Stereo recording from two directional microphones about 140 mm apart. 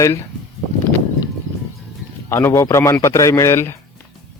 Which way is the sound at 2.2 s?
20° left (ahead or behind).